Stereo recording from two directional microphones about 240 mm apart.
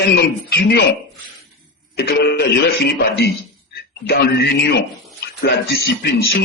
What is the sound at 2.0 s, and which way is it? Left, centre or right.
Speech, left.